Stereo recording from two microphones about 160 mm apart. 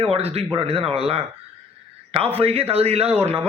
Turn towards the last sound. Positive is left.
turn(degrees=-35)  # may be behind; listen again after turning